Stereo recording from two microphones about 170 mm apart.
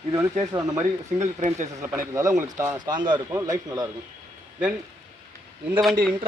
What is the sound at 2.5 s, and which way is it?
A man's voice, 15° right (ahead or behind).